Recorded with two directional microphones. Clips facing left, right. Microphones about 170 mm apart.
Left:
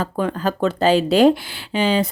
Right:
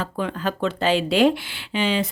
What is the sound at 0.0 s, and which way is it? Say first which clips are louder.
Speech: left 4 dB; 40° left (ahead or behind).